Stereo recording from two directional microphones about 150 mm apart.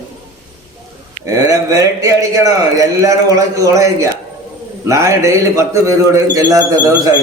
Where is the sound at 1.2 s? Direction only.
20° right (ahead or behind).